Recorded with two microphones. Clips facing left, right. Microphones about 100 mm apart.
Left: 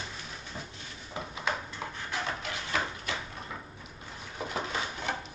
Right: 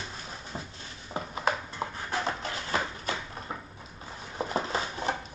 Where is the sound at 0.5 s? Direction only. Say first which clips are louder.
Right 3 dB; 30° right (ahead or behind).